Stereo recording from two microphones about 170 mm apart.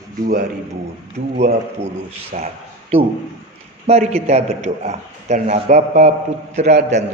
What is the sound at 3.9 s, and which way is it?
A man's voice, 40° right (ahead or behind).